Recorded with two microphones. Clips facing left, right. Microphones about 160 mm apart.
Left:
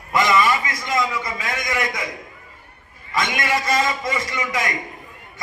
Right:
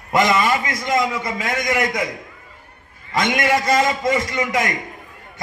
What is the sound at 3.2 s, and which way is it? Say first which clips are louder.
A man's voice: right 5 dB; 50° right (ahead or behind).